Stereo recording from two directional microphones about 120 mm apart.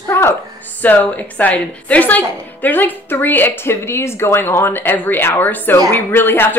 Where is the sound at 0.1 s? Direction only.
20° left (ahead or behind).